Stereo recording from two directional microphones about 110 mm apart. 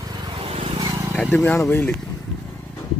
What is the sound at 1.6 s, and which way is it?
Speech, 20° left (ahead or behind).